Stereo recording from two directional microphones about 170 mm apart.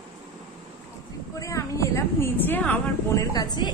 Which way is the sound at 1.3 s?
20° left (ahead or behind).